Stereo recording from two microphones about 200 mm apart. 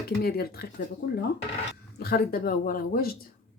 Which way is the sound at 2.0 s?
45° left (ahead or behind).